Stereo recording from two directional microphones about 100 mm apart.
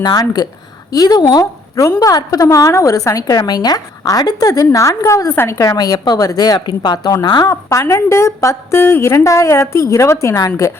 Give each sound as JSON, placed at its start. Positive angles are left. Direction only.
{"t": 0.0, "sound": "a woman's voice", "side_deg": 40}
{"t": 5.7, "sound": "a woman's voice", "side_deg": 40}
{"t": 7.5, "sound": "a woman's voice", "side_deg": 30}